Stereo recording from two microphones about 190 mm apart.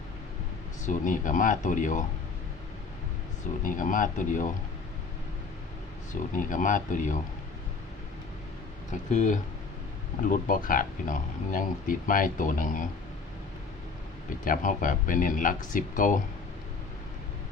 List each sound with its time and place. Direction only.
0.9 s speech: 45° left (ahead or behind)
3.6 s speech: 45° left (ahead or behind)
6.3 s speech: 45° left (ahead or behind)
8.9 s speech: 40° left (ahead or behind)
14.4 s speech: 45° left (ahead or behind)